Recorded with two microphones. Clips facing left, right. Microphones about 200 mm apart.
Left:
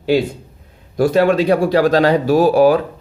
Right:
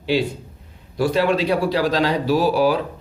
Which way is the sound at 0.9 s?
45° left (ahead or behind).